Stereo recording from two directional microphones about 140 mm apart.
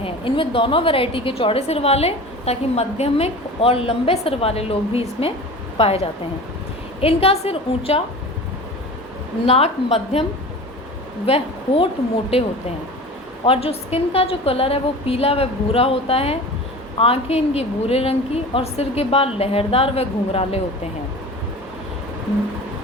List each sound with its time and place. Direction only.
0.0 s a woman's voice: 40° left (ahead or behind)
9.5 s a woman's voice: 45° left (ahead or behind)
11.3 s a woman's voice: 45° left (ahead or behind)